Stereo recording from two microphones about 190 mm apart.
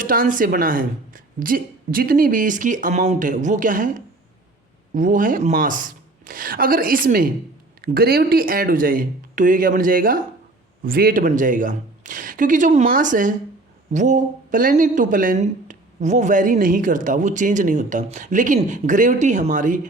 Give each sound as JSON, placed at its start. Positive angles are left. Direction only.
{"t": 0.0, "sound": "speech", "side_deg": -45}